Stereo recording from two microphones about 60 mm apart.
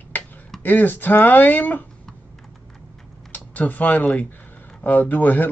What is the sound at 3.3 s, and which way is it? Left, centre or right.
Speech, left.